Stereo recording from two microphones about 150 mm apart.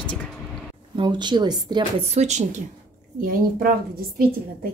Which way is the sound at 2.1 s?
50° right (ahead or behind).